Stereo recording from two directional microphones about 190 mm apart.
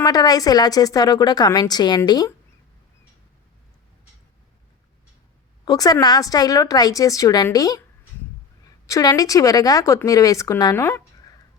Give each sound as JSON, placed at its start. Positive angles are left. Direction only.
{"t": 0.0, "sound": "a woman's voice", "side_deg": 20}
{"t": 5.6, "sound": "a woman's voice", "side_deg": 20}
{"t": 8.9, "sound": "speech", "side_deg": 20}